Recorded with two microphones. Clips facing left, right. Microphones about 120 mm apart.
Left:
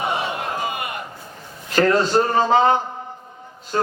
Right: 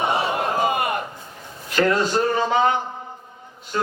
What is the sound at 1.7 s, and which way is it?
A man's voice, 40° left (ahead or behind).